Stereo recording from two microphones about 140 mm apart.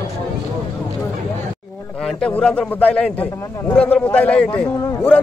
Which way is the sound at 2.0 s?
5° left (ahead or behind).